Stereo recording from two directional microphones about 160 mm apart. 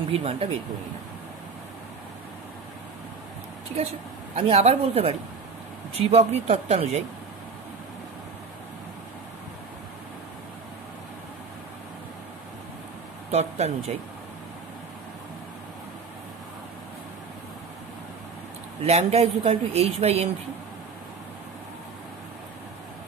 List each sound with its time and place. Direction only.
0.1 s speech: 35° right (ahead or behind)
4.4 s speech: 40° right (ahead or behind)
13.3 s speech: 40° right (ahead or behind)
18.8 s speech: 40° right (ahead or behind)